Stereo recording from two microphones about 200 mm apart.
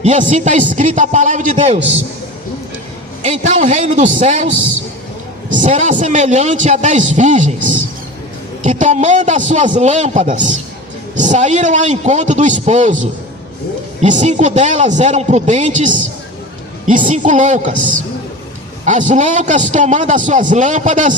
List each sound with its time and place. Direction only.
0.0 s a man's voice: 40° right (ahead or behind)
3.2 s a man's voice: 35° right (ahead or behind)
5.5 s a man's voice: 40° right (ahead or behind)
8.6 s a man's voice: 35° right (ahead or behind)
14.0 s a man's voice: 35° right (ahead or behind)
18.9 s a man's voice: 40° right (ahead or behind)